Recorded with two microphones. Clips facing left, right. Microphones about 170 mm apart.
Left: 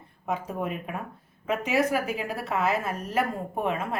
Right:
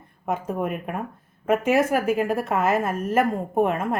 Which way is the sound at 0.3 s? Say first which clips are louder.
Right 4 dB; 50° right (ahead or behind).